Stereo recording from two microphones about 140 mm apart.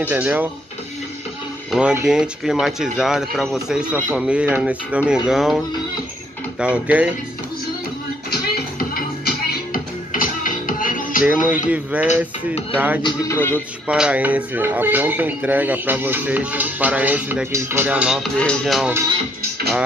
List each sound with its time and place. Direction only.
0.1 s speech: 15° right (ahead or behind)
1.7 s speech: 5° right (ahead or behind)
6.6 s speech: 10° right (ahead or behind)
8.3 s music: 90° left
11.2 s speech: 10° right (ahead or behind)
13.3 s a man's voice: 15° left (ahead or behind)
13.8 s speech: 10° right (ahead or behind)
18.4 s speech: 5° left (ahead or behind)